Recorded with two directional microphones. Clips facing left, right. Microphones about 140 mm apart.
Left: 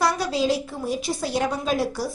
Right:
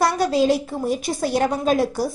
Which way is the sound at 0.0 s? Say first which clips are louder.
Right 4 dB; 50° right (ahead or behind).